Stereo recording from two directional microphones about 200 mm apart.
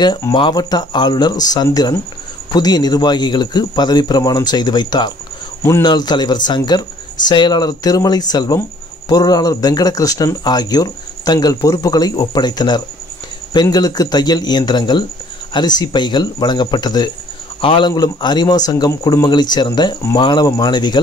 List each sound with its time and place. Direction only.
0.0 s speech: 20° left (ahead or behind)